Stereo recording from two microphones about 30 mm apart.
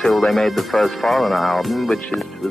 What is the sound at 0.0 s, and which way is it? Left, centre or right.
Speech, centre.